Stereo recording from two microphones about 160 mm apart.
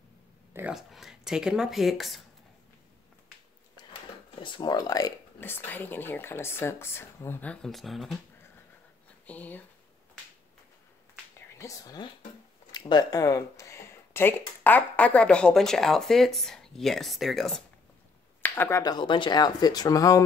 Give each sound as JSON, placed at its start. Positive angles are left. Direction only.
{"t": 0.5, "sound": "a sound", "side_deg": -15}
{"t": 0.7, "sound": "speech", "side_deg": 0}
{"t": 4.4, "sound": "speech", "side_deg": 30}
{"t": 9.2, "sound": "speech", "side_deg": 10}
{"t": 11.5, "sound": "speech", "side_deg": 20}
{"t": 18.4, "sound": "speech", "side_deg": 15}